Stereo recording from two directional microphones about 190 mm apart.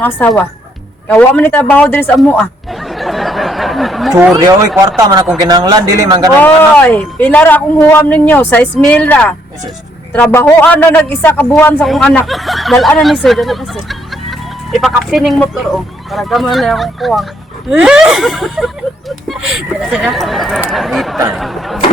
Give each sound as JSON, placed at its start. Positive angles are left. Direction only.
{"t": 0.2, "sound": "a man's voice", "side_deg": 10}
{"t": 2.9, "sound": "a sound", "side_deg": 0}
{"t": 4.1, "sound": "a man's voice", "side_deg": -15}
{"t": 6.4, "sound": "a man's voice", "side_deg": 10}